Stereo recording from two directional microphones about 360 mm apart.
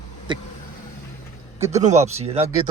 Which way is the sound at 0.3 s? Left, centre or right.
Centre.